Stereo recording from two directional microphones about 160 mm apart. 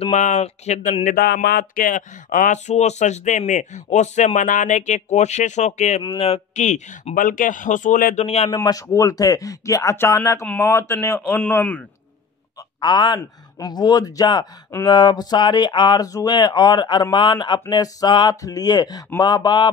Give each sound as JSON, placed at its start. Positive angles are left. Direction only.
{"t": 0.0, "sound": "speech", "side_deg": 45}
{"t": 1.1, "sound": "speech", "side_deg": 90}
{"t": 8.2, "sound": "speech", "side_deg": 40}
{"t": 8.5, "sound": "speech", "side_deg": 20}
{"t": 12.8, "sound": "speech", "side_deg": 25}